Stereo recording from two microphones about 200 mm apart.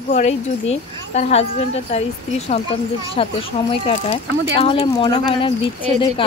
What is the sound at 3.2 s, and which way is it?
Speech, 30° left (ahead or behind).